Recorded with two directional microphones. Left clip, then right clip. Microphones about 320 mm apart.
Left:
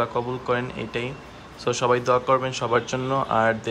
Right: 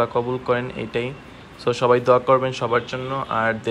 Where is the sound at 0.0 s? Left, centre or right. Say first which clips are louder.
Right 4 dB; centre.